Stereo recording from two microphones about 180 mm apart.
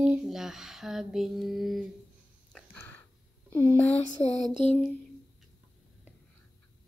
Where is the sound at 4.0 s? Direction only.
40° left (ahead or behind).